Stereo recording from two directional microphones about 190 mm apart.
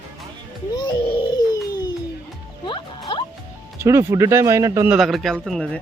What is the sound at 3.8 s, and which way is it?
Speech, 15° right (ahead or behind).